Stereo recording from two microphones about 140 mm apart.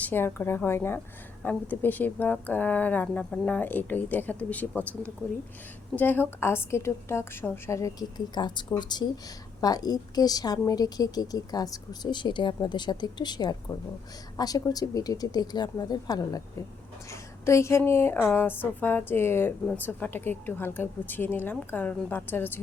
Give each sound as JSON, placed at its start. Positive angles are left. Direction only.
{"t": 0.0, "sound": "speech", "side_deg": 15}